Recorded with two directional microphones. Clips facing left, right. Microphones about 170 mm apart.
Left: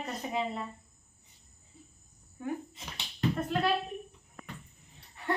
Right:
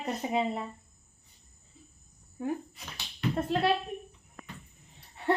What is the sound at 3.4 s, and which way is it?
Speech, 30° right (ahead or behind).